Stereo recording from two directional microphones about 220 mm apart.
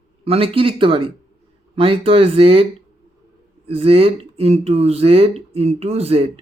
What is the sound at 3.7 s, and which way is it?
Speech, 25° right (ahead or behind).